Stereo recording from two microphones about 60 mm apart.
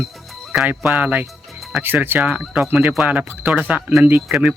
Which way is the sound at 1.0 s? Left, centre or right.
Right.